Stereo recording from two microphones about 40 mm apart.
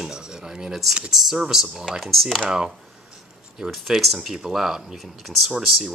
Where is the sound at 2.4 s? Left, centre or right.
Centre.